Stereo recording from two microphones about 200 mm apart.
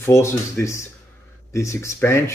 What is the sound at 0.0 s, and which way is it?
Speech, 15° left (ahead or behind).